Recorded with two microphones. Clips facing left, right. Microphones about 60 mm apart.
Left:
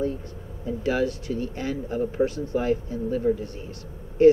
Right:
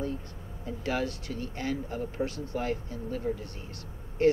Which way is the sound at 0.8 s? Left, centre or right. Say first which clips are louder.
Left 7 dB; centre.